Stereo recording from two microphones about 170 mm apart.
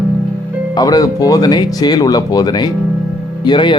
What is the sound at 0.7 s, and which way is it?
Speech, 20° left (ahead or behind).